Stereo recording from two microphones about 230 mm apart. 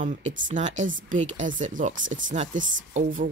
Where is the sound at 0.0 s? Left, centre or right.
Right.